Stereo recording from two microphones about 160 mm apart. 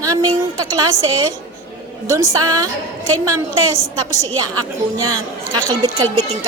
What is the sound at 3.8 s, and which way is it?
Speech, 15° left (ahead or behind).